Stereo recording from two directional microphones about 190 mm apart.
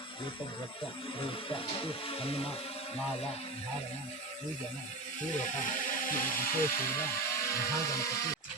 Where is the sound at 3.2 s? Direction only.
30° left (ahead or behind).